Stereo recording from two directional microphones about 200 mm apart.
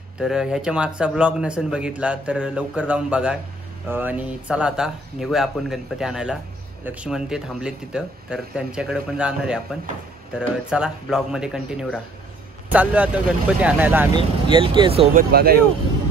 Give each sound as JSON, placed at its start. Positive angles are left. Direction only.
{"t": 0.2, "sound": "speech", "side_deg": -5}
{"t": 10.7, "sound": "speech", "side_deg": -5}
{"t": 14.1, "sound": "speech", "side_deg": -25}
{"t": 15.1, "sound": "speech", "side_deg": -50}